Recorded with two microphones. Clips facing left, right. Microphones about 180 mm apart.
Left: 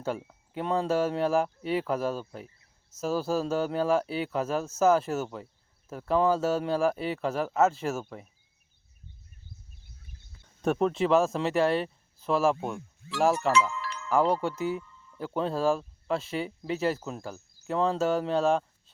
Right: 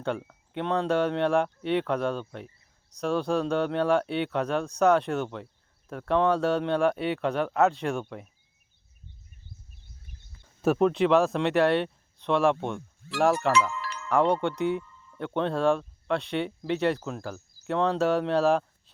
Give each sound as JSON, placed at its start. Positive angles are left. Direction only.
{"t": 0.5, "sound": "speech", "side_deg": 5}
{"t": 10.6, "sound": "speech", "side_deg": 0}
{"t": 13.5, "sound": "music", "side_deg": -60}
{"t": 14.1, "sound": "speech", "side_deg": 0}